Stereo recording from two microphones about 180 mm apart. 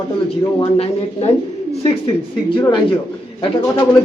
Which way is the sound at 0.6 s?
35° left (ahead or behind).